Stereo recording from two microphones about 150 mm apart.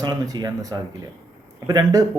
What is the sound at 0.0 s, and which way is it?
Speech, 25° right (ahead or behind).